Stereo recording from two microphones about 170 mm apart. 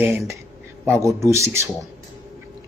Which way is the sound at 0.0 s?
15° right (ahead or behind).